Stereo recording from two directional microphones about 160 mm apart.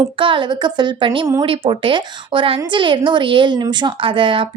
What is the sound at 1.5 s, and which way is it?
A woman's voice, 30° right (ahead or behind).